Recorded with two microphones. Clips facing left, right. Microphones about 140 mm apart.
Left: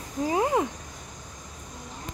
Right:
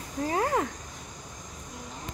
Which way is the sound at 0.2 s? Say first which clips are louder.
Left 3 dB; 15° left (ahead or behind).